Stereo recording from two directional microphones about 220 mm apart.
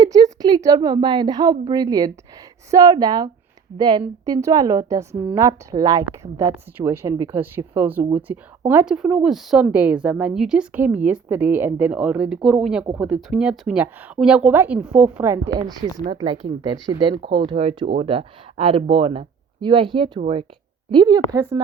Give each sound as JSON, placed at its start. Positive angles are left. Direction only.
{"t": 0.0, "sound": "a woman's voice", "side_deg": -15}